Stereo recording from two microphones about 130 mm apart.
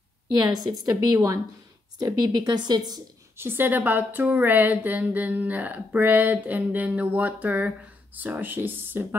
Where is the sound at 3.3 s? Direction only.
15° right (ahead or behind).